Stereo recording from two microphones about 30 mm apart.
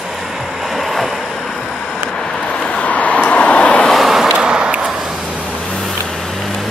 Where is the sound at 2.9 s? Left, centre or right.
Left.